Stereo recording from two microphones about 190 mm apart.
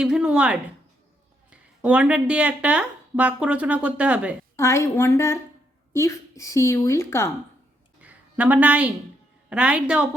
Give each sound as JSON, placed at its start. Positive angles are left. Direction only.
{"t": 0.0, "sound": "a woman's voice", "side_deg": -5}
{"t": 4.5, "sound": "a woman's voice", "side_deg": 15}
{"t": 8.0, "sound": "a sound", "side_deg": -10}
{"t": 9.5, "sound": "a woman's voice", "side_deg": -5}